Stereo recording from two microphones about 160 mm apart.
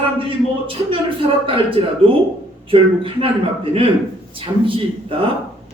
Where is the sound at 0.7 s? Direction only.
35° right (ahead or behind).